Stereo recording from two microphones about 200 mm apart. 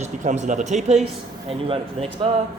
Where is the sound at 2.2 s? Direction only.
30° right (ahead or behind).